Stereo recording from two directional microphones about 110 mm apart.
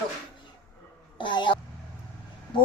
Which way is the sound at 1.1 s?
45° left (ahead or behind).